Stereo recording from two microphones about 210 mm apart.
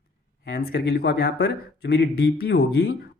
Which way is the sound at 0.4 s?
50° left (ahead or behind).